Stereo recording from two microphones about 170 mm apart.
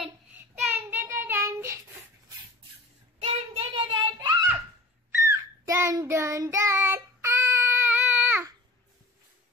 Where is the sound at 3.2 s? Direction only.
30° right (ahead or behind).